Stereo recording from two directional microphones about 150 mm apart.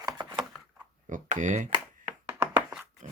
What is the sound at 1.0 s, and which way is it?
Speech, 55° right (ahead or behind).